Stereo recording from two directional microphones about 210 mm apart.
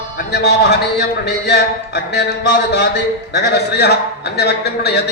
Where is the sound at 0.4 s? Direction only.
50° left (ahead or behind).